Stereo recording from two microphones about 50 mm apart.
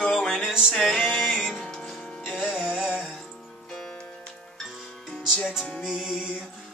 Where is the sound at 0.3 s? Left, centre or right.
Centre.